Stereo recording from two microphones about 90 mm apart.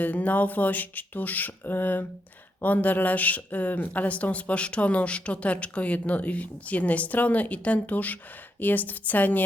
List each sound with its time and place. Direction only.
0.0 s speech: 20° left (ahead or behind)